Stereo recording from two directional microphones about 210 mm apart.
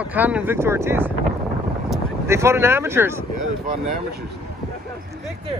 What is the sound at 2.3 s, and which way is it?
Speech, 15° right (ahead or behind).